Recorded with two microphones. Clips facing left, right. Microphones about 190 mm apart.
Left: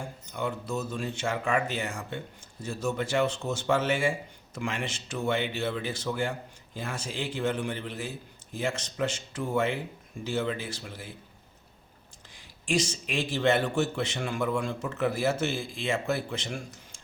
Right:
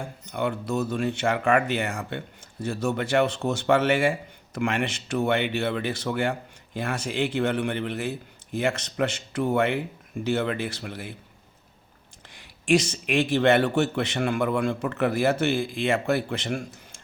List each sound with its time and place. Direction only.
0.3 s a man's voice: 65° right (ahead or behind)
12.3 s a man's voice: 65° right (ahead or behind)